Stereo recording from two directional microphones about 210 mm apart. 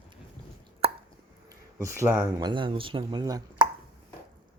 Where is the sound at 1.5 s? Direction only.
15° right (ahead or behind).